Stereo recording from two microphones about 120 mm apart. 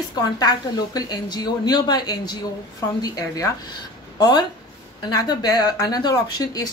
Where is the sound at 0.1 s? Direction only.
35° left (ahead or behind).